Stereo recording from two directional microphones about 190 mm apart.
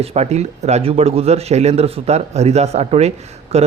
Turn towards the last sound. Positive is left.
turn(degrees=-35)  # may be behind; listen again after turning